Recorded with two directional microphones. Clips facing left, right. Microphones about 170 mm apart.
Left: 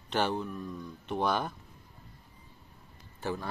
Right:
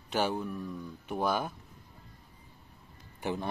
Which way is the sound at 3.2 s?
20° right (ahead or behind).